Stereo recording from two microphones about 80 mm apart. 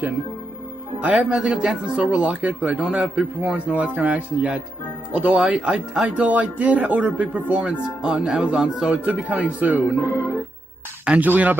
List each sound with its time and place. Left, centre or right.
1.0 s speech: centre
11.1 s speech: centre